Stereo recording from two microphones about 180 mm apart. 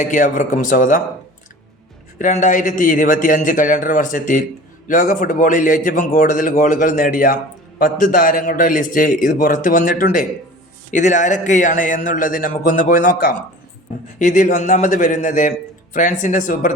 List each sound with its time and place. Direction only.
0.0 s a man's voice: 45° left (ahead or behind)
2.1 s a man's voice: 45° left (ahead or behind)